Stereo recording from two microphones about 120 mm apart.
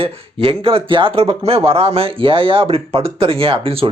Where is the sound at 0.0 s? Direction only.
50° right (ahead or behind).